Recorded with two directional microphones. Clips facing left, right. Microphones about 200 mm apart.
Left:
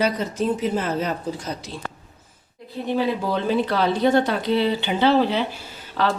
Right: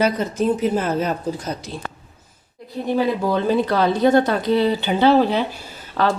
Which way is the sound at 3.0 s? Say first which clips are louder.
Right 4 dB; 45° right (ahead or behind).